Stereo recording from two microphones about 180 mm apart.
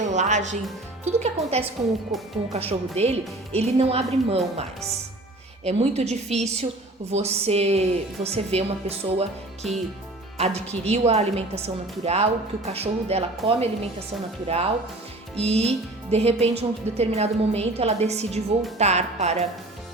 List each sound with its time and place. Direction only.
0.0 s music: 40° right (ahead or behind)
1.0 s a woman's voice: 35° right (ahead or behind)
2.1 s speech: centre (ahead or behind)
2.5 s a woman's voice: 35° right (ahead or behind)
5.6 s a woman's voice: 35° right (ahead or behind)
9.6 s speech: centre (ahead or behind)
10.3 s a woman's voice: 35° right (ahead or behind)